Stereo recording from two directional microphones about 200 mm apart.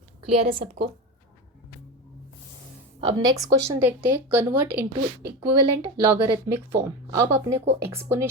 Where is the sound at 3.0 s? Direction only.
20° right (ahead or behind).